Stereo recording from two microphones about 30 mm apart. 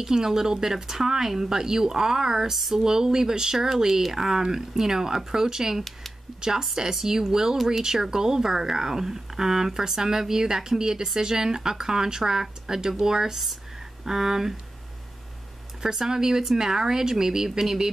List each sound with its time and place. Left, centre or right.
0.0 s speech: centre
3.5 s speech: centre
4.1 s speech: centre
15.8 s speech: centre